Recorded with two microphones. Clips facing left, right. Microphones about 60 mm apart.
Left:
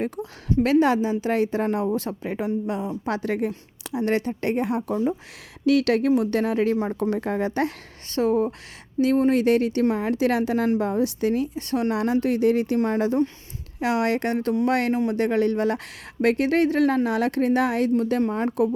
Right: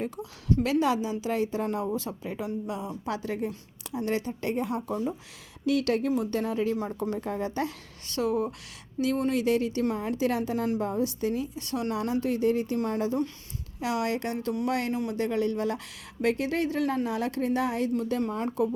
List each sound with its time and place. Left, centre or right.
0.0 s a woman's voice: left
5.6 s speech: left
8.1 s a woman's voice: left
9.4 s speech: left
11.5 s speech: left
13.7 s a woman's voice: left